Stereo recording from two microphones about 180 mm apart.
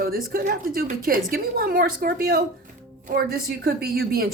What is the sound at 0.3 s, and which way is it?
Speech, 55° right (ahead or behind).